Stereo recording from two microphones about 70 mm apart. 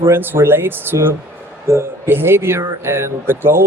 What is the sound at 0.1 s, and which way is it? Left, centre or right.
Speech, right.